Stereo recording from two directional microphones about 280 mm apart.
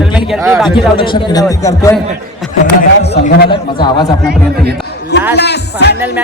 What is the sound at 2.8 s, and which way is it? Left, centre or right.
Speech, left.